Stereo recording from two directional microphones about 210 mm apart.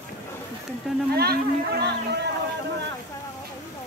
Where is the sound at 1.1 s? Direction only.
50° right (ahead or behind).